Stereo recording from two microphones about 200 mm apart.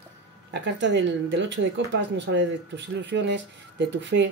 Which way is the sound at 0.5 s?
60° right (ahead or behind).